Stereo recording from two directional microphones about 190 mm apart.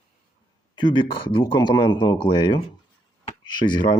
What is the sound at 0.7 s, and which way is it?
Speech, 25° left (ahead or behind).